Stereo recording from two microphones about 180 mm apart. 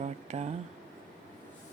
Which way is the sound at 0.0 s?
40° right (ahead or behind).